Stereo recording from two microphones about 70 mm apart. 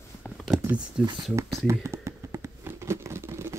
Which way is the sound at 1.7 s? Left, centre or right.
Right.